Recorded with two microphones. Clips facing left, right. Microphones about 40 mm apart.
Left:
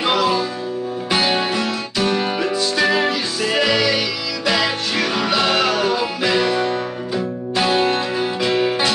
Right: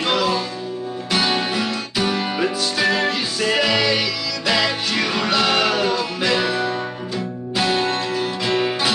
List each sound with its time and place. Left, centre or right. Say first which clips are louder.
0.0 s music: left 2 dB; centre
1.6 s music: left 1 dB; centre
8.4 s music: left 3 dB; centre